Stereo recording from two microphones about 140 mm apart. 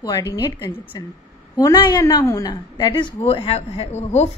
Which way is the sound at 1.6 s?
30° left (ahead or behind).